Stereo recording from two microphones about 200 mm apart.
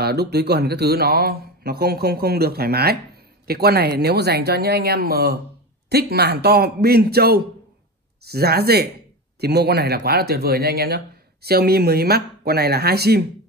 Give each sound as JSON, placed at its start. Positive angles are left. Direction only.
{"t": 0.0, "sound": "speech", "side_deg": -55}